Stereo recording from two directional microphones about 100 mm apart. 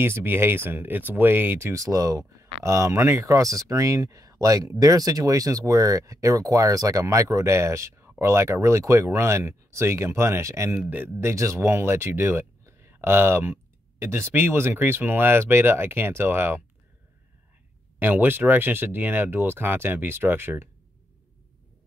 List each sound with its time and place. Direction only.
0.0 s speech: 20° right (ahead or behind)
17.9 s speech: 20° right (ahead or behind)